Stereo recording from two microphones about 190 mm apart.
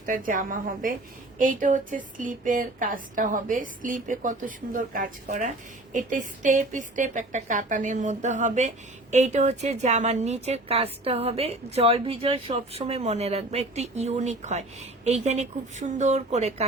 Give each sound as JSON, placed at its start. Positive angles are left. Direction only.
{"t": 0.0, "sound": "a woman's voice", "side_deg": -45}